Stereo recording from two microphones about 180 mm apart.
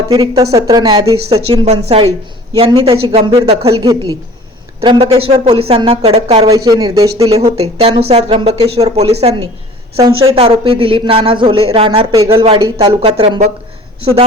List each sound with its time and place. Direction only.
0.1 s speech: 20° right (ahead or behind)
1.6 s a woman's voice: 35° right (ahead or behind)
6.7 s speech: 20° right (ahead or behind)
7.8 s a woman's voice: 35° right (ahead or behind)
11.9 s a woman's voice: 20° right (ahead or behind)